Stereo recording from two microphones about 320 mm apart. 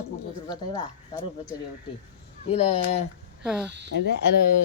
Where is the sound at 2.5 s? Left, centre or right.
Centre.